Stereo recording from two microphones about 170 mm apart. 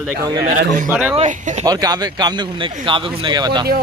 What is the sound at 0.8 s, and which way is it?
Speech, 10° right (ahead or behind).